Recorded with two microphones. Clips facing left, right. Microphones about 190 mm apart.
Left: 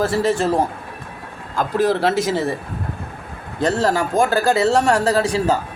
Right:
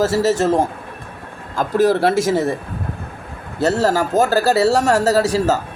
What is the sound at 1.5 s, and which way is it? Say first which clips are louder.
Speech: right 3 dB; 50° right (ahead or behind).